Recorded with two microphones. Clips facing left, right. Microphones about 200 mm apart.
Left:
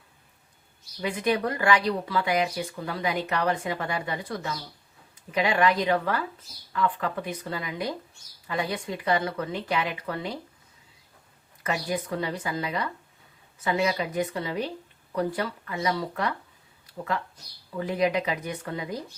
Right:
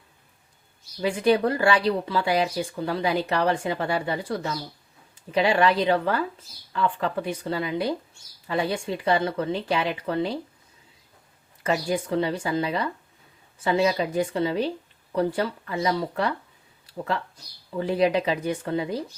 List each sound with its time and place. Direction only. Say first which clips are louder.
1.0 s speech: right 5 dB; 30° right (ahead or behind)
11.6 s speech: right 4 dB; 30° right (ahead or behind)
17.7 s speech: right 3 dB; 30° right (ahead or behind)